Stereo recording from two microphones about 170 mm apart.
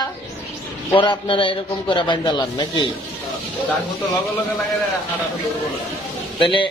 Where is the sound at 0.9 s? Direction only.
30° left (ahead or behind).